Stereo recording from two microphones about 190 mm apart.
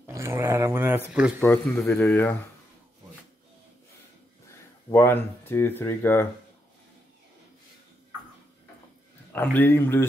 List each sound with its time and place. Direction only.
0.0 s dog: 15° right (ahead or behind)
1.4 s speech: 10° left (ahead or behind)
4.9 s speech: 10° left (ahead or behind)
9.3 s speech: 10° left (ahead or behind)